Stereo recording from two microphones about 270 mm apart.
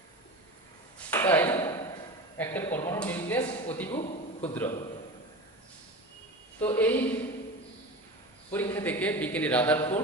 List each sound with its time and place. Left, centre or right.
0.9 s a sound: centre
2.4 s speech: centre
3.9 s a sound: left
4.4 s a man's voice: centre
6.6 s a man's voice: centre
8.5 s a man's voice: centre